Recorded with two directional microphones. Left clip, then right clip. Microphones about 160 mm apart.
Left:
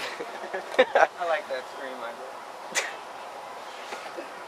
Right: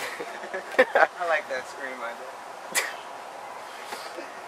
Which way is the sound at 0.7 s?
20° right (ahead or behind).